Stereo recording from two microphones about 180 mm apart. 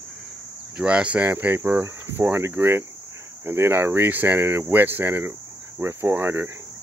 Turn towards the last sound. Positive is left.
turn(degrees=-10)  # may be behind; listen again after turning